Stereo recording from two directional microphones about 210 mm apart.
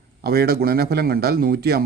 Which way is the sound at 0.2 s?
50° right (ahead or behind).